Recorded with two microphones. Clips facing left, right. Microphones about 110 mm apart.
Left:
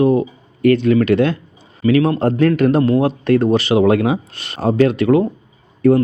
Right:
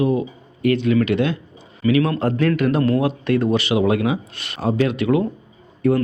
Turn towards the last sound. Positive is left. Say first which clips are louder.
# left 5 dB
turn(degrees=40)  # may be behind; listen again after turning